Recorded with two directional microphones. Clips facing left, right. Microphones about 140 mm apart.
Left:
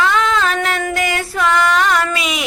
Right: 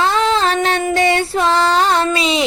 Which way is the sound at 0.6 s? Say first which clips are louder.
Right 3 dB; 25° right (ahead or behind).